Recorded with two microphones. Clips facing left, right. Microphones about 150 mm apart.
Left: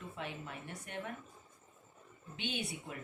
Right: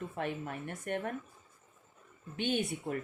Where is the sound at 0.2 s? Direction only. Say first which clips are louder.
Right 7 dB; 50° right (ahead or behind).